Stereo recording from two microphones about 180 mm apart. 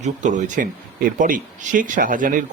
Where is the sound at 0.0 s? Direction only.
45° right (ahead or behind).